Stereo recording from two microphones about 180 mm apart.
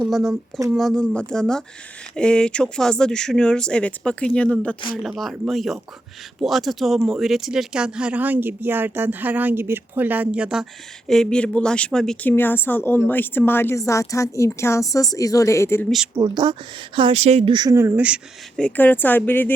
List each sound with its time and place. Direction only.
0.0 s speech: centre (ahead or behind); by 15.9 s 15° left (ahead or behind)
16.1 s speech: 20° right (ahead or behind)
18.5 s speech: 10° left (ahead or behind)